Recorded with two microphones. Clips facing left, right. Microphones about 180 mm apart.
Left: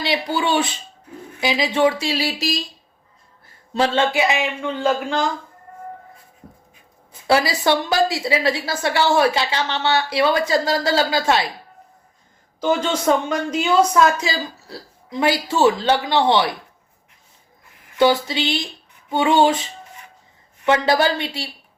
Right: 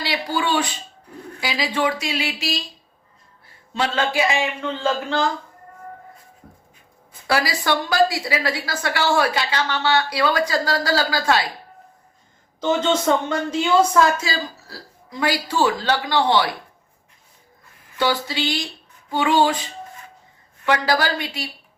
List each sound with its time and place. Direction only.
0.0 s a woman's voice: 25° left (ahead or behind)
3.7 s a woman's voice: 35° left (ahead or behind); by 5.2 s 15° left (ahead or behind)
7.1 s a woman's voice: 25° left (ahead or behind)
12.9 s a woman's voice: 10° left (ahead or behind)
17.9 s speech: 20° left (ahead or behind)
20.7 s a woman's voice: 25° left (ahead or behind)